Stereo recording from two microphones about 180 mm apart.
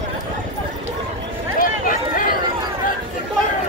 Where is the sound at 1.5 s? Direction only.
50° left (ahead or behind).